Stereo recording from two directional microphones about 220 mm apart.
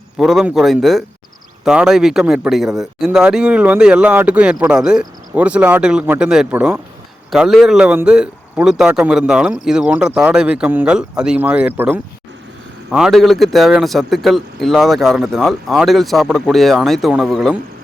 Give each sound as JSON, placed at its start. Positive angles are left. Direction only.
{"t": 0.2, "sound": "a man's voice", "side_deg": 0}